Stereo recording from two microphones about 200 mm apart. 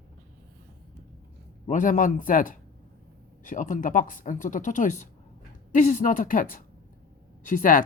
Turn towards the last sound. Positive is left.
turn(degrees=40)  # may be behind; listen again after turning